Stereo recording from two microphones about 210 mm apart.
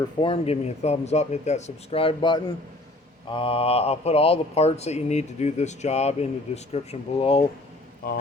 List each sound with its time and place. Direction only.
0.2 s speech: 25° left (ahead or behind)
8.0 s speech: 45° left (ahead or behind)